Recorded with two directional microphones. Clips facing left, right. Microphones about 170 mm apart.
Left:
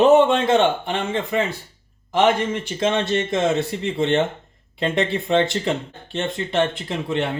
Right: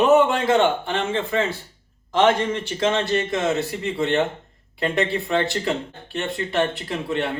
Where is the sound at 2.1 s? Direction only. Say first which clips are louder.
Even; 15° left (ahead or behind).